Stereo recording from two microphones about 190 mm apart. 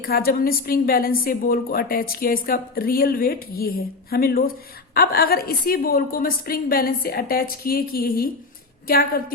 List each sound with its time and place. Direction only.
0.0 s a woman's voice: 50° left (ahead or behind)